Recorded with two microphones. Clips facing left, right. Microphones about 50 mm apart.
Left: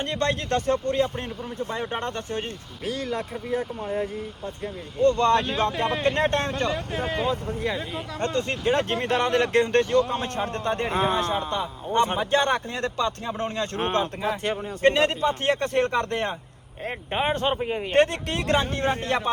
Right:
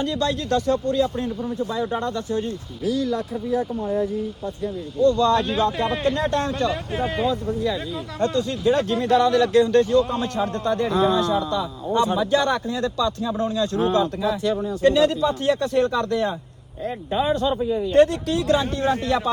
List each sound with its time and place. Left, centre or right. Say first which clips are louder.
0.0 s speech: right 2 dB; left
6.7 s speech: right 2 dB; centre
7.3 s speech: right 3 dB; left